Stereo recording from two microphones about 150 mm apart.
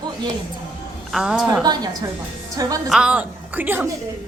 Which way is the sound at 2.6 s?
25° right (ahead or behind).